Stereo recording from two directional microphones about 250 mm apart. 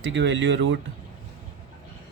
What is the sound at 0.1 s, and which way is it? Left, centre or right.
Speech, right.